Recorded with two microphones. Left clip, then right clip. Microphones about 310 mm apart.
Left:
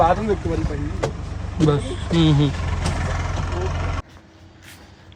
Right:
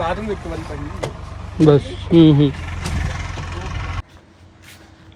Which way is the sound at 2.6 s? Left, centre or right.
Left.